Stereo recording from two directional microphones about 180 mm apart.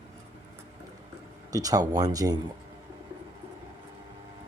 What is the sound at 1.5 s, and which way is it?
Speech, 20° right (ahead or behind).